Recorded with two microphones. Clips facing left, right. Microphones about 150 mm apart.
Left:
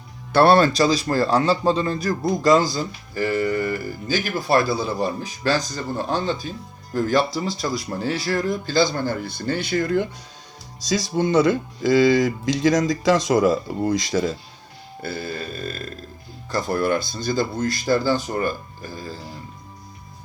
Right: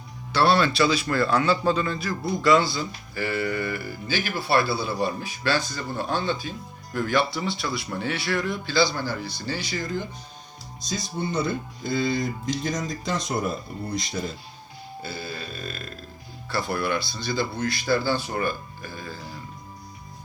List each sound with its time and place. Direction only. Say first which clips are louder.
0.3 s a man's voice: left 5 dB; 50° left (ahead or behind)
10.8 s speech: left 8 dB; 90° left
15.0 s speech: left 6 dB; 50° left (ahead or behind); by 19.2 s 35° left (ahead or behind)